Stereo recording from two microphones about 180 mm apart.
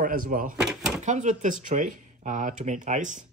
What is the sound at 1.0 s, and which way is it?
Speech, 40° right (ahead or behind).